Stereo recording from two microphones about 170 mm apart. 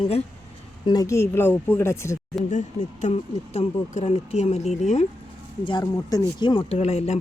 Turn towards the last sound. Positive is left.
turn(degrees=40)  # may be behind; listen again after turning